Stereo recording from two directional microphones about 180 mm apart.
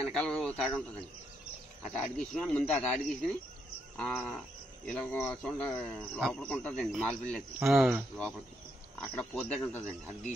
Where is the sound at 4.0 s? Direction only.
5° left (ahead or behind).